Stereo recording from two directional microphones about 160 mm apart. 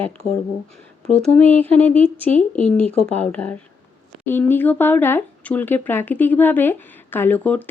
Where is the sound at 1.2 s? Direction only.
10° left (ahead or behind).